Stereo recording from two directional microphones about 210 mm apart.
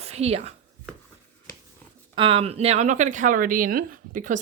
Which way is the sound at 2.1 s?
25° right (ahead or behind).